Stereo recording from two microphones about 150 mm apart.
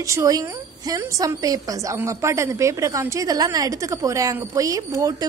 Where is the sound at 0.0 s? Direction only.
20° right (ahead or behind).